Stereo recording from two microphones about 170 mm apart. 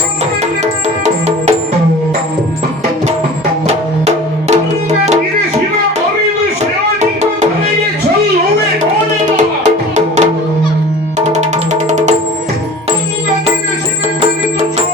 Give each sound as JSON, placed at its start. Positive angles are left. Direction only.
{"t": 0.6, "sound": "music", "side_deg": -40}
{"t": 3.7, "sound": "music", "side_deg": -40}
{"t": 8.8, "sound": "music", "side_deg": -45}